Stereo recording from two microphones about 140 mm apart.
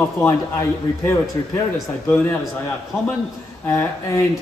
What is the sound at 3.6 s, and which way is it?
Speech, 20° left (ahead or behind).